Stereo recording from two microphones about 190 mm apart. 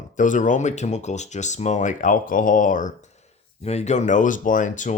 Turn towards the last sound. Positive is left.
turn(degrees=40)  # may be behind; listen again after turning